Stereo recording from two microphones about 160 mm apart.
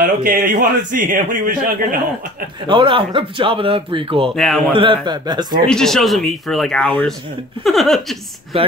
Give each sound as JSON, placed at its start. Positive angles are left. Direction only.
{"t": 0.0, "sound": "speech", "side_deg": -60}
{"t": 2.6, "sound": "speech", "side_deg": -30}
{"t": 4.4, "sound": "speech", "side_deg": 0}
{"t": 4.7, "sound": "a man's voice", "side_deg": -30}
{"t": 5.7, "sound": "speech", "side_deg": 5}
{"t": 8.5, "sound": "speech", "side_deg": -35}